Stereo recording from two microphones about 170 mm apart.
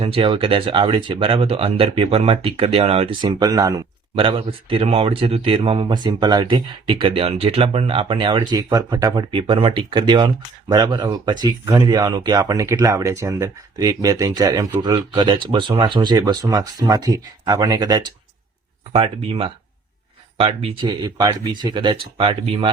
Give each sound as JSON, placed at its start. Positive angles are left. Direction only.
{"t": 0.0, "sound": "speech", "side_deg": -30}